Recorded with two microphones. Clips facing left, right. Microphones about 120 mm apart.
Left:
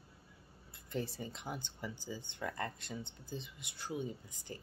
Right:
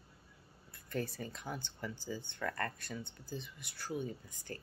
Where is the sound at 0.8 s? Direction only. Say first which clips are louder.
Right 1 dB; 25° left (ahead or behind).